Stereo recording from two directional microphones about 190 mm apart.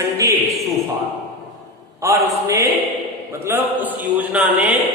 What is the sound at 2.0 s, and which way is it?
Speech, 15° right (ahead or behind).